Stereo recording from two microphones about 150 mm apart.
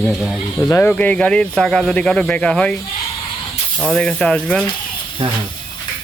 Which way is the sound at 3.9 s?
5° left (ahead or behind).